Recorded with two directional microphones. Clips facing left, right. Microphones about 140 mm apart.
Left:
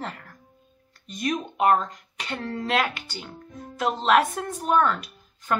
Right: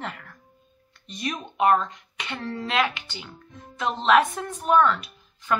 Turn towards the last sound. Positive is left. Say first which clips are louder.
# even
turn(degrees=45)  # may be behind; listen again after turning